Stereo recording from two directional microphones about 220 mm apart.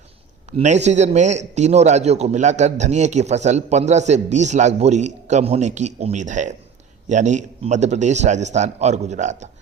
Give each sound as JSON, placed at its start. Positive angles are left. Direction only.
{"t": 0.5, "sound": "a man's voice", "side_deg": -30}